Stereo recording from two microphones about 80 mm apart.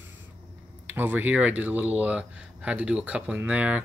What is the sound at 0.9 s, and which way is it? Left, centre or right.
Speech, right.